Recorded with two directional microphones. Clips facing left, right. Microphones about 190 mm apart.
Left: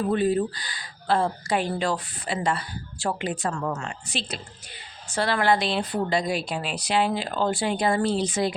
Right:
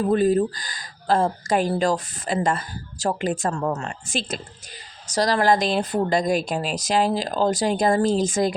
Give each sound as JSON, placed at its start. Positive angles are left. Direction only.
{"t": 0.1, "sound": "speech", "side_deg": -40}